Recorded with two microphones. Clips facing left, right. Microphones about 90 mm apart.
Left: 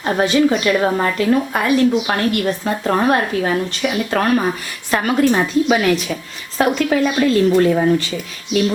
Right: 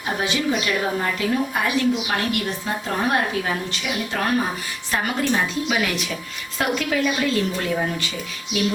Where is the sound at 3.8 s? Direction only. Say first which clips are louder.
Left 7 dB; 80° left.